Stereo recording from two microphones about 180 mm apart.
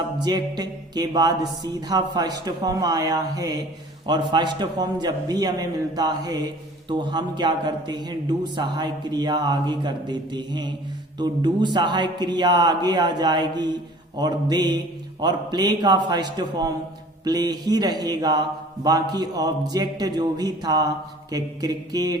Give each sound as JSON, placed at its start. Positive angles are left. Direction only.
{"t": 0.2, "sound": "speech", "side_deg": -25}